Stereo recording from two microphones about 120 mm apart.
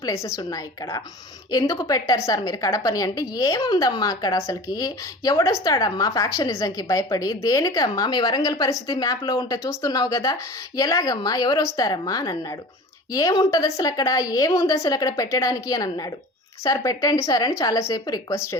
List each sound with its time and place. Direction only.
0.0 s a woman's voice: 25° left (ahead or behind)